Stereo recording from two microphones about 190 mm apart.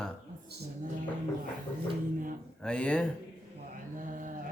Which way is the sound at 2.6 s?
5° left (ahead or behind).